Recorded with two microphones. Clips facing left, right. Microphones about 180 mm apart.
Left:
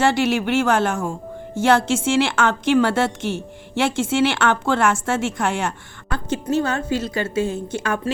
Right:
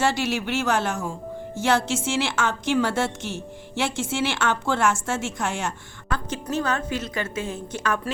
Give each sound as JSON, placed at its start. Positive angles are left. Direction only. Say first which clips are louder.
{"t": 0.0, "sound": "a woman's voice", "louder": "left 5 dB", "side_deg": 55}
{"t": 6.1, "sound": "a woman's voice", "louder": "left 5 dB", "side_deg": 30}